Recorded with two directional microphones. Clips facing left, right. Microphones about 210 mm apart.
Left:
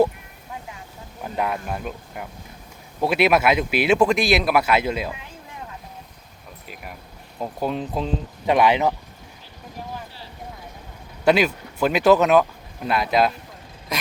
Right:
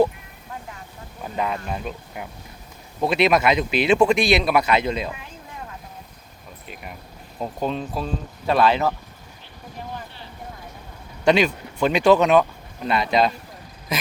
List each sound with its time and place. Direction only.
1.2 s speech: 5° left (ahead or behind)
7.3 s speech: 5° left (ahead or behind)
7.8 s speech: 20° left (ahead or behind)
11.3 s speech: 5° left (ahead or behind)
13.9 s a sound: centre (ahead or behind)